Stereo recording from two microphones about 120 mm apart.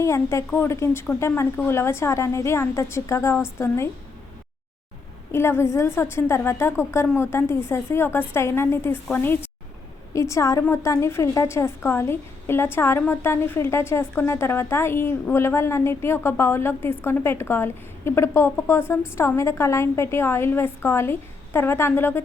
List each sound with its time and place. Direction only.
0.0 s a woman's voice: 25° left (ahead or behind)
5.3 s a woman's voice: 20° left (ahead or behind)